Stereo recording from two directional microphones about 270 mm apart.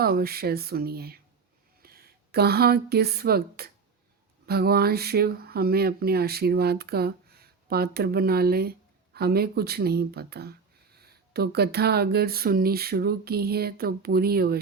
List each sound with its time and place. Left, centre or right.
0.0 s speech: right